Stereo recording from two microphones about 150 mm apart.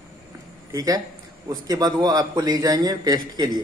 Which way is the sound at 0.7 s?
25° right (ahead or behind).